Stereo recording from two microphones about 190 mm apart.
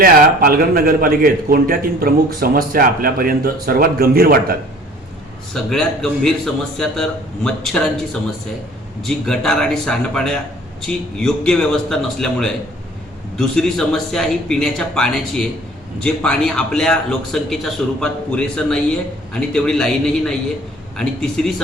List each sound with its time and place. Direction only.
0.0 s a man's voice: 50° right (ahead or behind)
5.6 s a man's voice: centre (ahead or behind)
9.0 s a man's voice: centre (ahead or behind)